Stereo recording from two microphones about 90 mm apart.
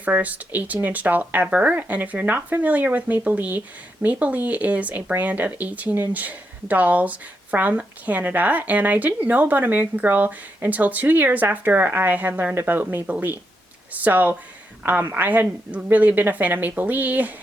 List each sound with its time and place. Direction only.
0.0 s speech: 15° right (ahead or behind)